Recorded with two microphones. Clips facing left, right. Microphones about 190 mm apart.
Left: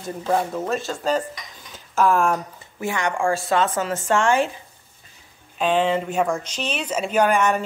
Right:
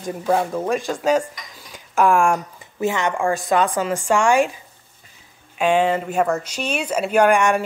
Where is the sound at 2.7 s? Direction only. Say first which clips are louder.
Right 3 dB; 20° right (ahead or behind).